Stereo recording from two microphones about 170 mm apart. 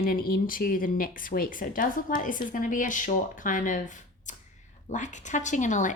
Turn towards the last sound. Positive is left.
turn(degrees=45)  # may be behind; listen again after turning